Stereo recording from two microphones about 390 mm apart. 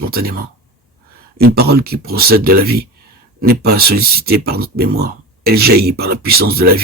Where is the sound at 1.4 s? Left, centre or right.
Right.